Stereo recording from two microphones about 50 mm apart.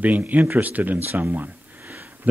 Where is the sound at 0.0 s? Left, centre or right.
Right.